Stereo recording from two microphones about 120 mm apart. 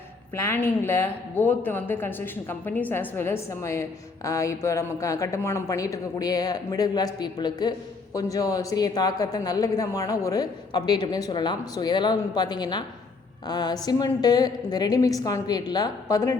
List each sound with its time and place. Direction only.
0.3 s a woman's voice: 20° left (ahead or behind)